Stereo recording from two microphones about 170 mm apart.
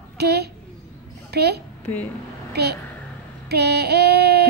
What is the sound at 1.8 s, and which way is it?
Speech, 10° left (ahead or behind).